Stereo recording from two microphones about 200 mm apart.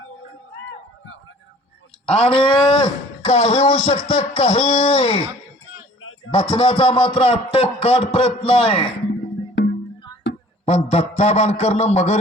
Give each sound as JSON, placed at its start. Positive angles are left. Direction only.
{"t": 2.1, "sound": "speech", "side_deg": 25}
{"t": 6.0, "sound": "a sound", "side_deg": 90}
{"t": 6.5, "sound": "speech", "side_deg": 30}
{"t": 9.6, "sound": "music", "side_deg": 55}
{"t": 10.3, "sound": "a sound", "side_deg": 55}
{"t": 10.7, "sound": "a man's voice", "side_deg": 30}